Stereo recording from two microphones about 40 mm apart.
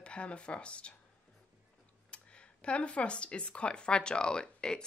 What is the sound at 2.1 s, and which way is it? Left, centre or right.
Speech, left.